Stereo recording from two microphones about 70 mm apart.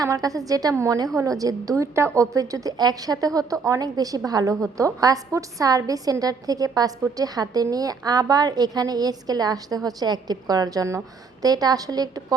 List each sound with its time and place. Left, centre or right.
0.0 s a woman's voice: right
2.7 s a woman's voice: right